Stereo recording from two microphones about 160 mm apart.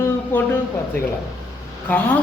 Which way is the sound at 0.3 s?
15° left (ahead or behind).